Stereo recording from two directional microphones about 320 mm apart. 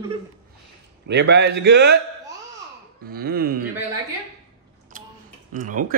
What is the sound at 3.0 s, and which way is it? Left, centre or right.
Speech, right.